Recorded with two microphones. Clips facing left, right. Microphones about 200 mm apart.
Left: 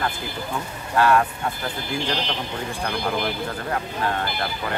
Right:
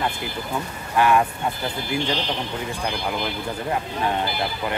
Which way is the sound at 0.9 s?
15° right (ahead or behind).